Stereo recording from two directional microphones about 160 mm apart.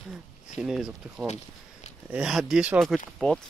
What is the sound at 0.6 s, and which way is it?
Speech, centre (ahead or behind).